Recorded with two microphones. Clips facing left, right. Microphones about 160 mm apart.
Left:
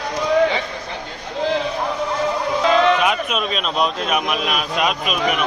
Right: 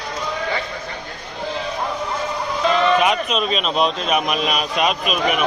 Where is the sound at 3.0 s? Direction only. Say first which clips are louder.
Right 1 dB; 5° left (ahead or behind).